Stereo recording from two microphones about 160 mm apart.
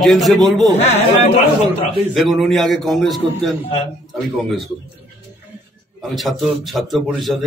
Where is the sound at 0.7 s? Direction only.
45° left (ahead or behind).